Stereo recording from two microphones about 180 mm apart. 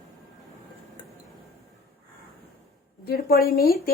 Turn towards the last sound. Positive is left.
turn(degrees=60)  # may be behind; listen again after turning